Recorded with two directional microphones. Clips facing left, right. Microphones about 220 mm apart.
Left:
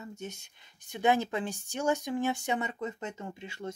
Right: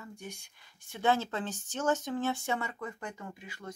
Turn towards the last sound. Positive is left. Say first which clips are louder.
# left 5 dB
turn(degrees=25)  # may be behind; listen again after turning